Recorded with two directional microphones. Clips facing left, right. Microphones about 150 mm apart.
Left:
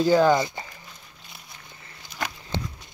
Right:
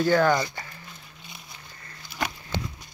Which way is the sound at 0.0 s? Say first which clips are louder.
Left 3 dB; 15° left (ahead or behind).